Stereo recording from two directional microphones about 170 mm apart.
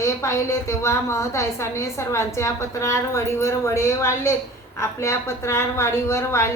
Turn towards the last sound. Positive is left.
turn(degrees=15)  # may be behind; listen again after turning